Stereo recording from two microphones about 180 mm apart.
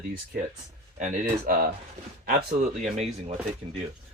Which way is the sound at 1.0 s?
45° right (ahead or behind).